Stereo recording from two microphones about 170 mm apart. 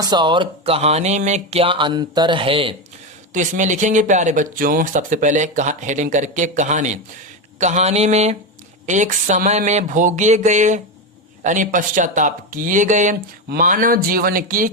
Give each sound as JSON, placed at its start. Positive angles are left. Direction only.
{"t": 0.0, "sound": "speech", "side_deg": -25}
{"t": 3.3, "sound": "speech", "side_deg": -45}